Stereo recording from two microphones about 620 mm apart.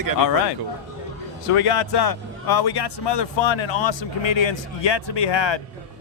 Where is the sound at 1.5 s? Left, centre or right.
Left.